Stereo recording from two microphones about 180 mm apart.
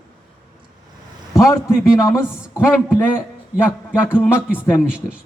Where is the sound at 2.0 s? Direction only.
15° left (ahead or behind).